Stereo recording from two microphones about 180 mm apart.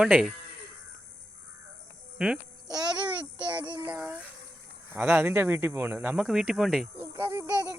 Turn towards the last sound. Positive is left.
turn(degrees=-10)  # may be behind; listen again after turning